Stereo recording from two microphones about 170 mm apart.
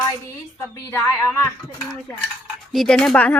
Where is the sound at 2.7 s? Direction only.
5° left (ahead or behind).